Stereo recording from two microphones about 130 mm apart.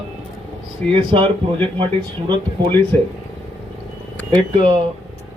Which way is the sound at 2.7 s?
15° left (ahead or behind).